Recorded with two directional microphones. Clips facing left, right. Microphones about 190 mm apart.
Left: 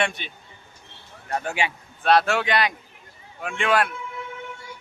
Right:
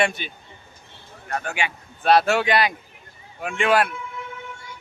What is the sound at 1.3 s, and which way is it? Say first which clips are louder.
Speech: left 1 dB; 25° left (ahead or behind).